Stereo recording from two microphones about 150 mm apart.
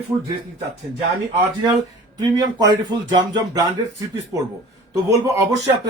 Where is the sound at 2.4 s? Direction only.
25° right (ahead or behind).